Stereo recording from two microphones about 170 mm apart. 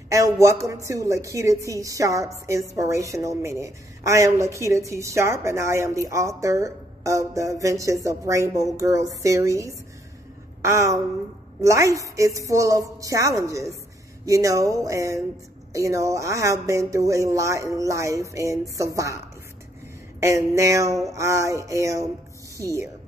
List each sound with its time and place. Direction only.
0.1 s a woman's voice: 20° right (ahead or behind)
20.2 s a woman's voice: 15° right (ahead or behind)